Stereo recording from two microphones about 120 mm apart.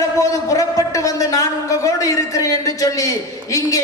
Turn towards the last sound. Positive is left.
turn(degrees=30)  # may be behind; listen again after turning